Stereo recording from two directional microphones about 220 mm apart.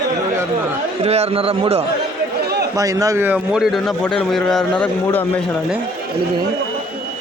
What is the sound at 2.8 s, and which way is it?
A man's voice, 15° right (ahead or behind).